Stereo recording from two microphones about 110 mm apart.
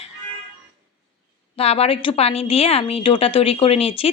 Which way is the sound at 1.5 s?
65° left (ahead or behind).